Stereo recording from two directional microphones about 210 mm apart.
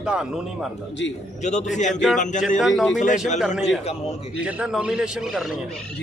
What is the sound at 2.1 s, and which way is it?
Speech, 35° left (ahead or behind).